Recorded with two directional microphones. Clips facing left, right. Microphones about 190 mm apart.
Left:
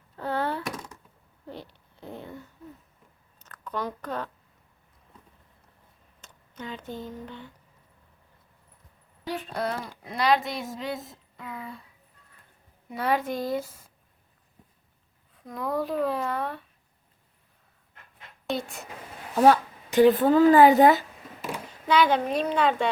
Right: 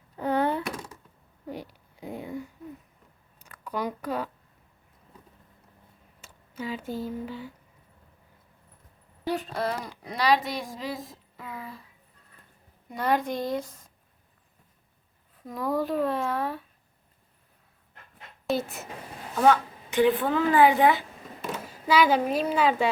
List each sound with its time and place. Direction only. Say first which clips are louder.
0.2 s a sound: right 3 dB; 15° right (ahead or behind)
6.2 s speech: right 4 dB; 5° right (ahead or behind)
9.5 s speech: even; centre (ahead or behind)
12.9 s speech: even; centre (ahead or behind)
15.4 s speech: right 1 dB; centre (ahead or behind)
18.4 s speech: right 3 dB; centre (ahead or behind)
19.4 s speech: left 2 dB; 35° left (ahead or behind)
21.7 s speech: even; 5° right (ahead or behind)